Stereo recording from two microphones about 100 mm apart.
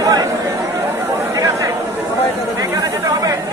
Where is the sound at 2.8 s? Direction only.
35° right (ahead or behind).